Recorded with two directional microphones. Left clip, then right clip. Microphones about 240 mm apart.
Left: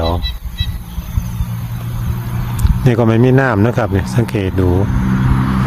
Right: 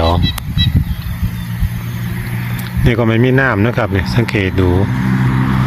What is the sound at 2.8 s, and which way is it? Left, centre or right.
Speech, centre.